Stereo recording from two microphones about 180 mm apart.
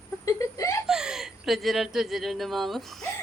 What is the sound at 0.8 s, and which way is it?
Speech, 5° right (ahead or behind).